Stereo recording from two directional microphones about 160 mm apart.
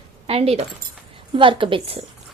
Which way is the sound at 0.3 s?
40° right (ahead or behind).